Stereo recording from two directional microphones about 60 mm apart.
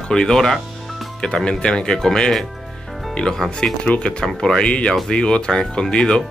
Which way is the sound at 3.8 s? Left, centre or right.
Centre.